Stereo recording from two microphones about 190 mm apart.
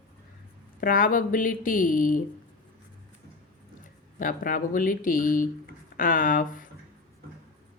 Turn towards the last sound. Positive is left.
turn(degrees=45)  # may be behind; listen again after turning